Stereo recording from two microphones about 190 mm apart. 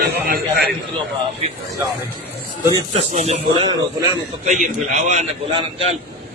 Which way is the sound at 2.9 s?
35° right (ahead or behind).